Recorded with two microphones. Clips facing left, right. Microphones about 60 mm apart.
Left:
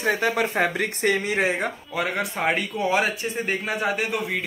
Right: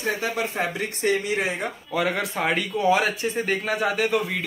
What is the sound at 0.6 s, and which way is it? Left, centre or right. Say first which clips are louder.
Speech: left 3 dB; left.